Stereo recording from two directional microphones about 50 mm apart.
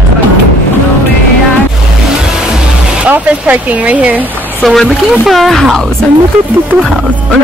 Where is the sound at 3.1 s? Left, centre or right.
Right.